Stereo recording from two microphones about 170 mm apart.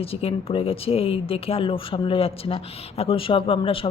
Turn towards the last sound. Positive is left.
turn(degrees=30)  # may be behind; listen again after turning